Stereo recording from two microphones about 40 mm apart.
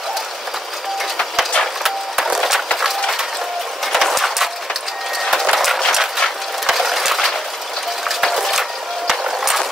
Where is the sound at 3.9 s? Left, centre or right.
Centre.